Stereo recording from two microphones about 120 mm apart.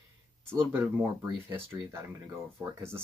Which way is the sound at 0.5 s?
20° right (ahead or behind).